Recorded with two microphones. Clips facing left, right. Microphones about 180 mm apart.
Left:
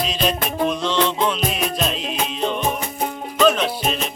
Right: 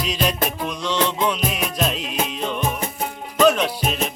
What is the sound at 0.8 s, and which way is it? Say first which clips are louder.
Music: left 2 dB; 15° right (ahead or behind).